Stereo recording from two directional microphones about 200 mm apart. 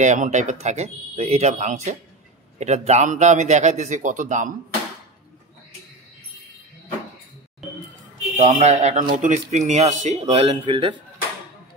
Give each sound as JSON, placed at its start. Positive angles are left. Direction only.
{"t": 0.0, "sound": "speech", "side_deg": -35}
{"t": 8.4, "sound": "speech", "side_deg": -35}